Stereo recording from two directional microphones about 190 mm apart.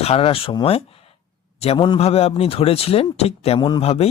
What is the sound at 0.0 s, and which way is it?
Speech, 30° left (ahead or behind).